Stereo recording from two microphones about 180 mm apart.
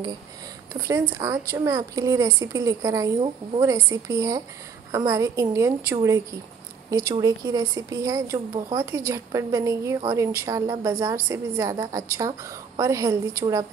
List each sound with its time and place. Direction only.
0.8 s speech: 20° right (ahead or behind)
6.9 s speech: 20° right (ahead or behind)